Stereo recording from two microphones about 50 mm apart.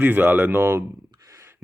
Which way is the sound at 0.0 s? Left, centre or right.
Right.